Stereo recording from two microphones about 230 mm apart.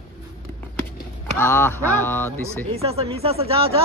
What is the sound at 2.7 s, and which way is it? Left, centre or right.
Speech, right.